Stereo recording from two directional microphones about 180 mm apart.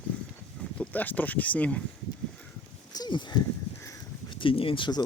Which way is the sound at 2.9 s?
25° left (ahead or behind).